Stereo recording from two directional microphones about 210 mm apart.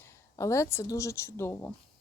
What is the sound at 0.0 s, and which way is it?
Speech, 15° left (ahead or behind).